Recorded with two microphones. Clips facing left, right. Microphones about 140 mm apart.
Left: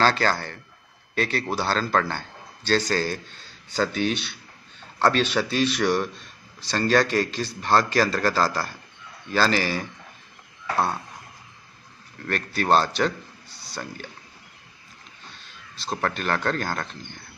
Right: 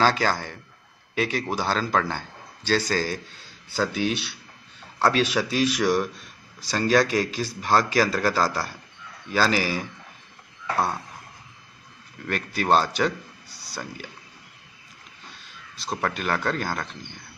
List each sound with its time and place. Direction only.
0.0 s speech: 10° right (ahead or behind)
12.3 s a man's voice: 10° right (ahead or behind)
15.8 s speech: 10° right (ahead or behind)